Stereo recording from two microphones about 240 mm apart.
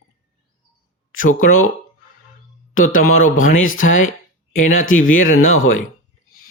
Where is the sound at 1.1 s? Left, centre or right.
Left.